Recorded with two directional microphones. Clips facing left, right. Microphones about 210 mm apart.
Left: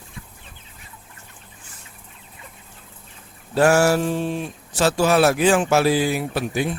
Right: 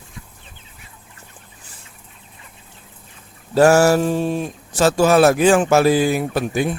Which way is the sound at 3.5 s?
40° right (ahead or behind).